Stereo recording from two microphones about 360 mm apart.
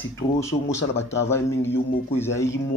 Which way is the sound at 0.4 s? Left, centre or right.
Centre.